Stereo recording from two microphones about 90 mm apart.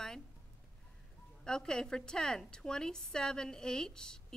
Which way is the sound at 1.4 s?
5° left (ahead or behind).